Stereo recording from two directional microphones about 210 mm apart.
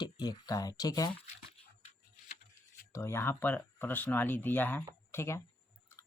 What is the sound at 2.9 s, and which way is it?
Speech, 10° left (ahead or behind).